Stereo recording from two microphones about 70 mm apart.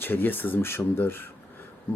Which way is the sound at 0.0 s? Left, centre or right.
Left.